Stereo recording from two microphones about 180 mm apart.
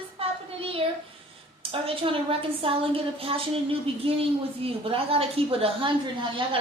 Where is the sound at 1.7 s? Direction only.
30° right (ahead or behind).